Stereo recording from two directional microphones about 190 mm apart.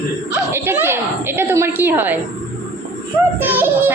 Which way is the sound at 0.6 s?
10° right (ahead or behind).